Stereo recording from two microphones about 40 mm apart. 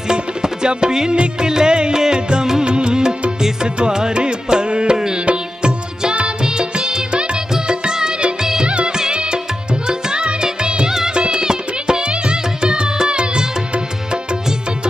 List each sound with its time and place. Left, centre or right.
0.1 s tabla: centre
1.2 s music: centre